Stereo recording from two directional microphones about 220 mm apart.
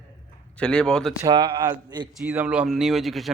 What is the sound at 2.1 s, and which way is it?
Speech, 5° right (ahead or behind).